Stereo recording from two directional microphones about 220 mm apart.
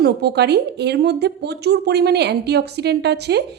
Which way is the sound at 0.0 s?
50° right (ahead or behind).